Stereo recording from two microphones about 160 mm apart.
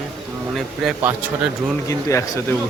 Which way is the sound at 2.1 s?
20° left (ahead or behind).